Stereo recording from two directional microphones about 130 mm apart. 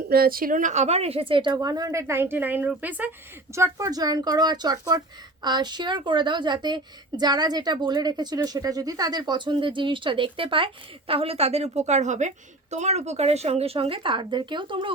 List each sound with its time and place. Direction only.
0.3 s a woman's voice: 85° right; by 3.1 s 15° right (ahead or behind)
3.5 s speech: 25° right (ahead or behind); by 14.9 s 40° right (ahead or behind)